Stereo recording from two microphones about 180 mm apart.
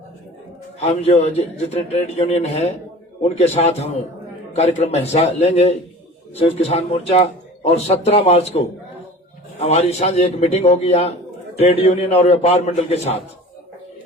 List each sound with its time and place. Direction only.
0.8 s a man's voice: 35° left (ahead or behind)